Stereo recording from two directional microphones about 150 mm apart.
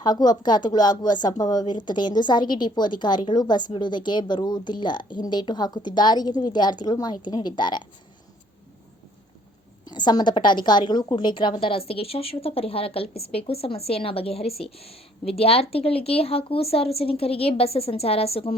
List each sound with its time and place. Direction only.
0.0 s a woman's voice: 25° left (ahead or behind)
9.8 s a woman's voice: 30° left (ahead or behind)